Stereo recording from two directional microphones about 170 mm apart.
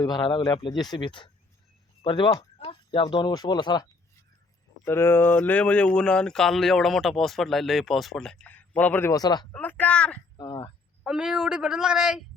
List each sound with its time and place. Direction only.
0.0 s speech: 25° left (ahead or behind)
4.9 s a man's voice: 15° left (ahead or behind)
9.5 s a sound: 10° left (ahead or behind)
10.3 s chop: 25° left (ahead or behind)
11.0 s speech: 5° right (ahead or behind)